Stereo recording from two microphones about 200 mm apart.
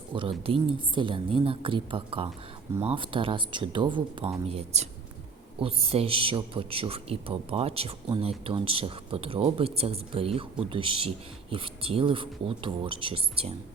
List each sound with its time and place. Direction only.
0.1 s a man's voice: 25° right (ahead or behind)